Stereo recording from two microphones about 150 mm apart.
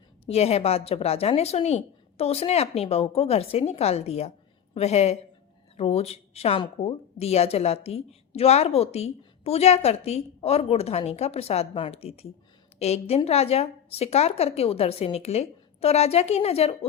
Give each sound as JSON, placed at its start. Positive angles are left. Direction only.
{"t": 0.3, "sound": "a woman's voice", "side_deg": 45}